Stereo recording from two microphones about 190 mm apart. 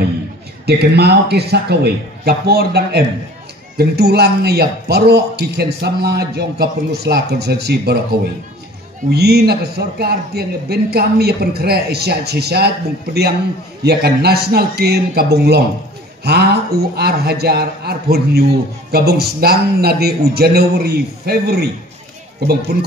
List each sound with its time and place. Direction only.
0.7 s a man's voice: 60° right (ahead or behind)